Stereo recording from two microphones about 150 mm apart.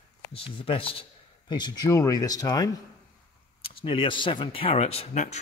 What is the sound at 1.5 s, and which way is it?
Speech, 25° left (ahead or behind).